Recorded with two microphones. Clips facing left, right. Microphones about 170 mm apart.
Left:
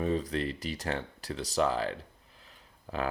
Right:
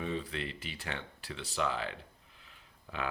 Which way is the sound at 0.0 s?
40° left (ahead or behind).